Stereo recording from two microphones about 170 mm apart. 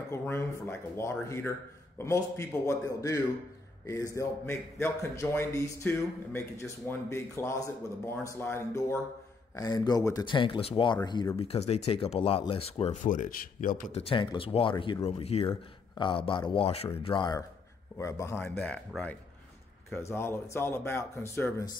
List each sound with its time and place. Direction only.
0.1 s a man's voice: 15° left (ahead or behind); by 13.9 s 50° left (ahead or behind)
13.9 s a man's voice: 30° left (ahead or behind); by 21.7 s 15° left (ahead or behind)